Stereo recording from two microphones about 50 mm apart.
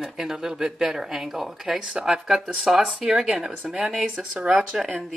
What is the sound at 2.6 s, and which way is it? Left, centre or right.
Speech, centre.